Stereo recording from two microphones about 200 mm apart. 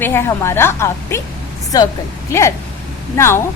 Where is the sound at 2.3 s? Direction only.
15° left (ahead or behind).